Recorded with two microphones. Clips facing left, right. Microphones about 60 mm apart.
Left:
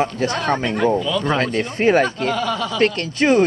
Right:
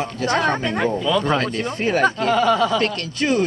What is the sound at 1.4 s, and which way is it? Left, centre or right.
Speech, left.